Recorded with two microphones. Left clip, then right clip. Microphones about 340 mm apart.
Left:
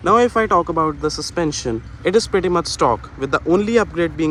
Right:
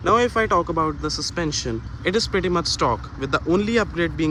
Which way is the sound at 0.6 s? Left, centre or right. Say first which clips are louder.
Left 4 dB; left.